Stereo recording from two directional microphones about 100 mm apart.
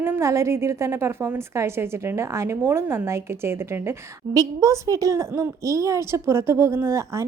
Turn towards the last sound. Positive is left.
turn(degrees=-30)  # may be behind; listen again after turning